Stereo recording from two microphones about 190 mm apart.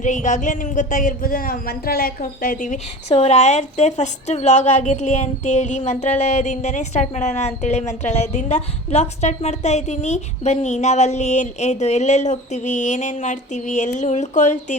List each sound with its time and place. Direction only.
0.0 s speech: 40° left (ahead or behind)